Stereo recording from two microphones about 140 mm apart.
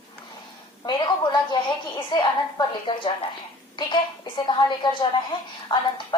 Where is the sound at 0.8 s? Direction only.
30° left (ahead or behind).